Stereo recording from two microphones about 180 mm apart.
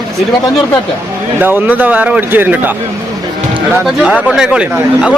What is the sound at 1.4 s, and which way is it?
A man's voice, 10° right (ahead or behind).